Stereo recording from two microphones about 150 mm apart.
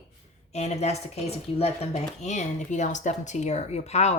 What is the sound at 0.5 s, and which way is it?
Speech, 45° left (ahead or behind).